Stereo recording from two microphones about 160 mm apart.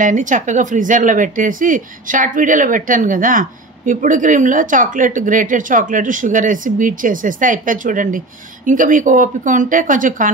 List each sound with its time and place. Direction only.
0.0 s speech: 50° right (ahead or behind)